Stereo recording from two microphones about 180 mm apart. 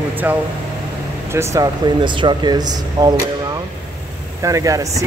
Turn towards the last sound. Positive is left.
turn(degrees=-20)  # may be behind; listen again after turning